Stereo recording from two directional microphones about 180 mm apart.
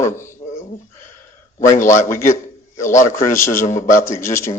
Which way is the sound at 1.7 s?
45° left (ahead or behind).